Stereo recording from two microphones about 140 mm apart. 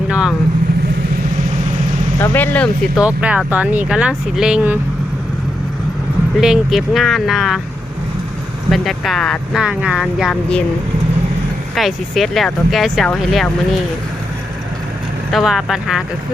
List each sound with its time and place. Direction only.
0.1 s speech: 5° right (ahead or behind)
2.2 s speech: 15° left (ahead or behind)
2.9 s speech: 10° right (ahead or behind)
6.4 s speech: 5° right (ahead or behind)
8.7 s speech: centre (ahead or behind)
11.7 s speech: centre (ahead or behind)
15.3 s speech: centre (ahead or behind)